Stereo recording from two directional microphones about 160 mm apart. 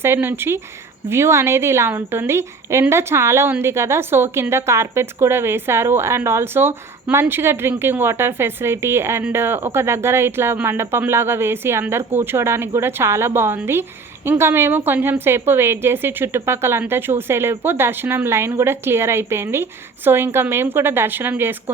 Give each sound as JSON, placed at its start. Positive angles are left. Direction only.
{"t": 0.0, "sound": "a woman's voice", "side_deg": -15}